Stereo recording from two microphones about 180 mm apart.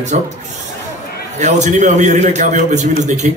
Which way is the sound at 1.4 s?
40° right (ahead or behind).